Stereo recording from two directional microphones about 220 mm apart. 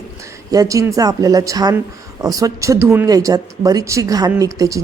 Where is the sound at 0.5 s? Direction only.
15° right (ahead or behind).